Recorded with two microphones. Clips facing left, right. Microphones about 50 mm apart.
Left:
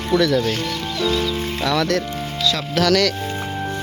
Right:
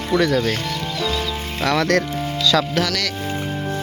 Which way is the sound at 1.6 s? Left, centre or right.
Right.